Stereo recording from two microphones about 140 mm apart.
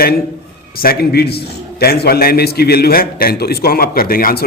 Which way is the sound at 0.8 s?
90° left.